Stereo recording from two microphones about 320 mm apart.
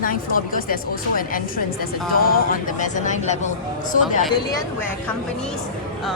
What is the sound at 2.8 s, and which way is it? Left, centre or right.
Speech, left.